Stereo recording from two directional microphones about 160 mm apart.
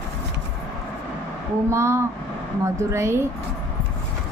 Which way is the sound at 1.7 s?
15° right (ahead or behind).